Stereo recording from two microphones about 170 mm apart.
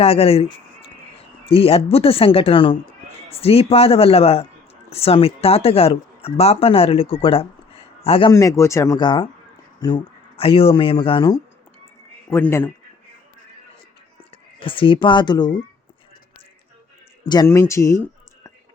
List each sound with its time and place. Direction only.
0.0 s speech: 35° left (ahead or behind)
8.3 s speech: 20° left (ahead or behind)
12.3 s speech: 15° left (ahead or behind)
14.6 s speech: 30° left (ahead or behind)
17.2 s speech: 20° left (ahead or behind)